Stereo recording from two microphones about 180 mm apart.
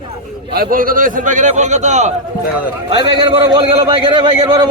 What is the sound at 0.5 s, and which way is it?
A man's voice, 55° right (ahead or behind).